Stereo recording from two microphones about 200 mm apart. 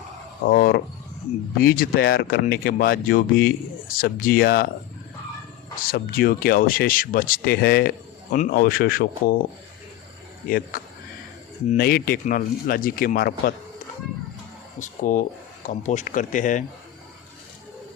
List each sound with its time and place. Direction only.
0.4 s speech: 45° left (ahead or behind)
5.8 s speech: 45° left (ahead or behind)
11.8 s speech: 50° left (ahead or behind)
14.8 s speech: 40° left (ahead or behind)